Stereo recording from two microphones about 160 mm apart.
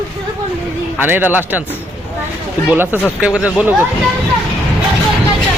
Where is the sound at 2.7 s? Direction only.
10° right (ahead or behind).